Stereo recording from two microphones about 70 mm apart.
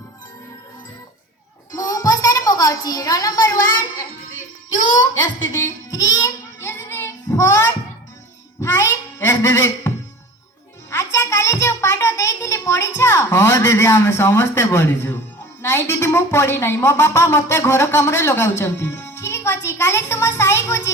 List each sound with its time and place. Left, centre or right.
1.7 s a woman's voice: left
4.9 s a child's voice: left
6.2 s child singing: left
7.3 s child singing: left
8.6 s a sound: left
10.9 s a child's voice: left